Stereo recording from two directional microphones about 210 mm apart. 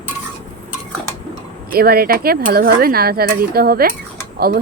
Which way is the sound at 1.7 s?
45° right (ahead or behind).